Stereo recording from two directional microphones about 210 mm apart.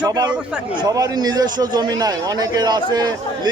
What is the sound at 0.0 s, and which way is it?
A man's voice, 20° right (ahead or behind).